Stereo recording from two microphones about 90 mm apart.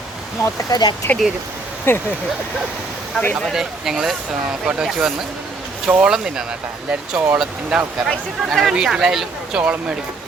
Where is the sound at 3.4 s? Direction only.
5° right (ahead or behind).